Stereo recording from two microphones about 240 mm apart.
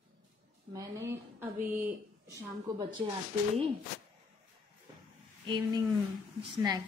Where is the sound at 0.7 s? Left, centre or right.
Centre.